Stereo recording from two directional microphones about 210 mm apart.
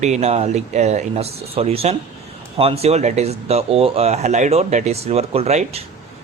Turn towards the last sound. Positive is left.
turn(degrees=-30)  # may be behind; listen again after turning